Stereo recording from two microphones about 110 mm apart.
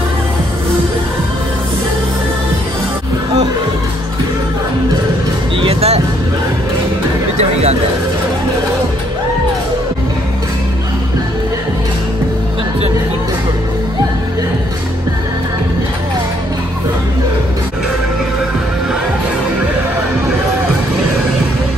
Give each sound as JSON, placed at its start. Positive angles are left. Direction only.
{"t": 5.6, "sound": "music", "side_deg": -65}